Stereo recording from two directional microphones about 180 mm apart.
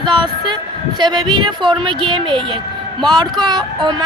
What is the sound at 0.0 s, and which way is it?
Speech, 25° right (ahead or behind).